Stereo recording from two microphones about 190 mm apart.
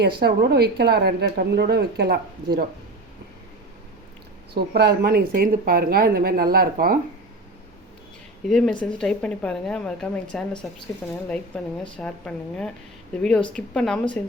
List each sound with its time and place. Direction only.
0.0 s a woman's voice: 55° right (ahead or behind)
4.5 s speech: 60° right (ahead or behind)
8.4 s a woman's voice: centre (ahead or behind)